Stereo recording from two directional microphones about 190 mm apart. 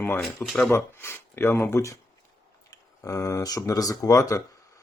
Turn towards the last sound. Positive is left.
turn(degrees=15)  # may be behind; listen again after turning